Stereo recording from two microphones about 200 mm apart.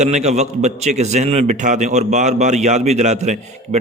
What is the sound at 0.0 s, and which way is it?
A man's voice, 35° right (ahead or behind).